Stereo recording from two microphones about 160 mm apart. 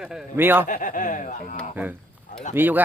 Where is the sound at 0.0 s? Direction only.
5° right (ahead or behind).